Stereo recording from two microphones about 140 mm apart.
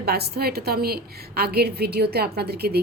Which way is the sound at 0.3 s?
90° right.